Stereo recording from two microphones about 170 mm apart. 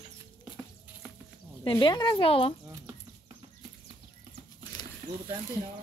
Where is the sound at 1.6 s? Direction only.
30° left (ahead or behind).